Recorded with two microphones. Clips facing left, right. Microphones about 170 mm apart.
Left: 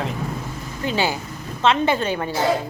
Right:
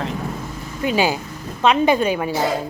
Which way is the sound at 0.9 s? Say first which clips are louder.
Right 3 dB; 15° right (ahead or behind).